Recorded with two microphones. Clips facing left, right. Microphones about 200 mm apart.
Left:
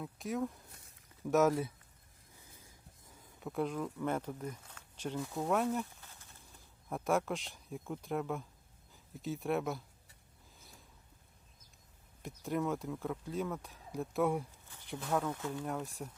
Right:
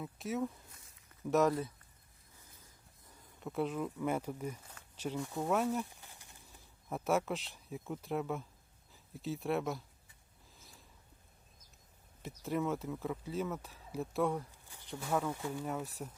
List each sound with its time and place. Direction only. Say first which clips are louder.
0.0 s speech: even; centre (ahead or behind)
5.8 s a sound: even; 15° right (ahead or behind)
6.5 s speech: even; centre (ahead or behind)
10.6 s a sound: left 1 dB; centre (ahead or behind)
12.2 s speech: even; centre (ahead or behind)
14.9 s speech: even; 5° right (ahead or behind)